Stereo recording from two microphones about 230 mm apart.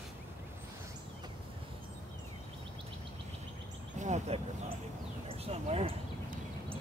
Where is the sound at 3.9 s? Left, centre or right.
Right.